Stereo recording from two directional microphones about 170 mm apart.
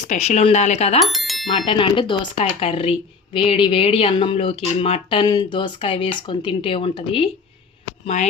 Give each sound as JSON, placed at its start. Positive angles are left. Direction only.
{"t": 0.1, "sound": "speech", "side_deg": 40}
{"t": 0.9, "sound": "speech", "side_deg": 0}
{"t": 1.5, "sound": "speech", "side_deg": 30}